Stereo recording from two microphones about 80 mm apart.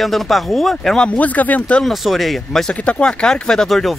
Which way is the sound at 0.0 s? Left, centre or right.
Centre.